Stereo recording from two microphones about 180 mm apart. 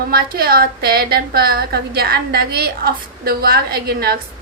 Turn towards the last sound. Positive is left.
turn(degrees=-55)  # may be behind; listen again after turning